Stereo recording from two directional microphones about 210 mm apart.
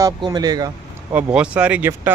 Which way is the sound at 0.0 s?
15° right (ahead or behind).